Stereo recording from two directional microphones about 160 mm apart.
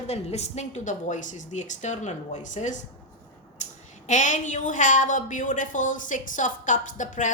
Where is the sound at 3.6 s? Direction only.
50° left (ahead or behind).